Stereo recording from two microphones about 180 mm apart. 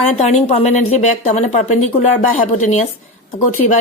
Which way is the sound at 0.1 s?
40° left (ahead or behind).